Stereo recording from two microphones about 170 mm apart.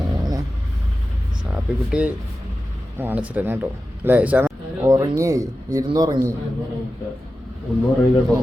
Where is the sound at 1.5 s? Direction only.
5° right (ahead or behind).